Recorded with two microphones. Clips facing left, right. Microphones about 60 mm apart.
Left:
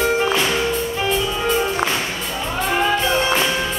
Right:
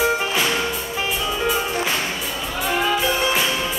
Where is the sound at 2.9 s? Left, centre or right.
Centre.